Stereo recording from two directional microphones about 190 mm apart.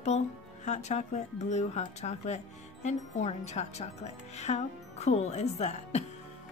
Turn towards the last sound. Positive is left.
turn(degrees=35)  # may be behind; listen again after turning